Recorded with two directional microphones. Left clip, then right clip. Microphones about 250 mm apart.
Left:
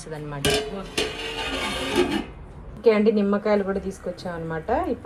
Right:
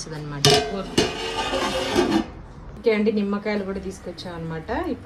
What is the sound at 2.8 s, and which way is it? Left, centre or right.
Speech, centre.